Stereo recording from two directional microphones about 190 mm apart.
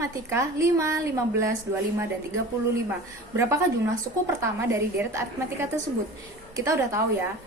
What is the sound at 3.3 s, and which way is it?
A woman's voice, 15° right (ahead or behind).